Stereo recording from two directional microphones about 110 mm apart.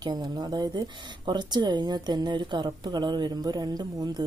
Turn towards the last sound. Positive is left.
turn(degrees=-40)  # may be behind; listen again after turning